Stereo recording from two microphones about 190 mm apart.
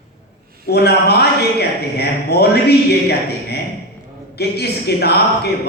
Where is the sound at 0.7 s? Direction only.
60° left (ahead or behind).